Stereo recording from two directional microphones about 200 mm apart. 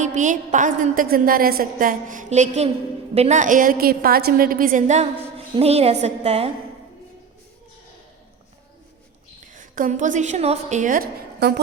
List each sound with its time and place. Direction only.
0.0 s a woman's voice: 40° right (ahead or behind)
9.4 s a woman's voice: 40° right (ahead or behind)